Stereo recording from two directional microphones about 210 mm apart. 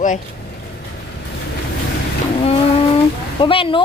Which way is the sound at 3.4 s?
25° left (ahead or behind).